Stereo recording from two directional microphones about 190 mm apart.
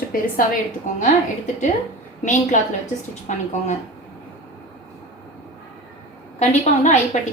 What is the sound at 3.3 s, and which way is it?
Speech, 40° left (ahead or behind).